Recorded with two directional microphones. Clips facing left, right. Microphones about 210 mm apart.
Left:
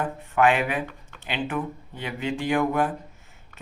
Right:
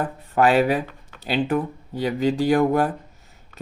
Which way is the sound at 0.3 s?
35° right (ahead or behind).